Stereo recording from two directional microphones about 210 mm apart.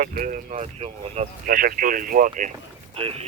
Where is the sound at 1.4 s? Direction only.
40° right (ahead or behind).